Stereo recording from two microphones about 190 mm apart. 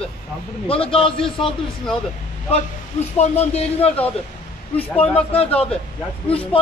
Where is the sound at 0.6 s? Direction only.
30° left (ahead or behind).